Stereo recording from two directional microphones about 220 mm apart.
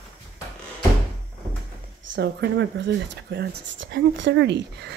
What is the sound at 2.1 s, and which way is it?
Speech, 50° right (ahead or behind).